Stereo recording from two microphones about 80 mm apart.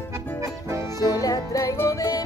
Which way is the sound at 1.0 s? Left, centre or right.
Left.